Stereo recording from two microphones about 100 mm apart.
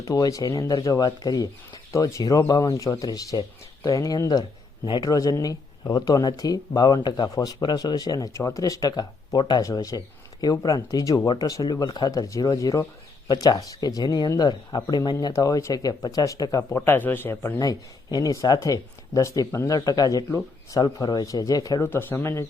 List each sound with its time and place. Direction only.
0.0 s speech: 35° left (ahead or behind)
21.8 s speech: 25° left (ahead or behind)